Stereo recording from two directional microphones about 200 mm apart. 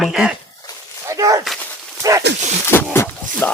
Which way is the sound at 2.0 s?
15° right (ahead or behind).